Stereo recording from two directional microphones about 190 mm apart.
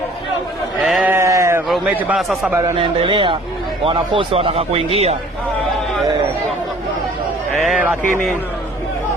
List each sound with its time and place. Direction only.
0.8 s sheep: 5° right (ahead or behind)
1.7 s a man's voice: 5° right (ahead or behind)
2.7 s a man's voice: 25° right (ahead or behind)
7.7 s a man's voice: 5° right (ahead or behind)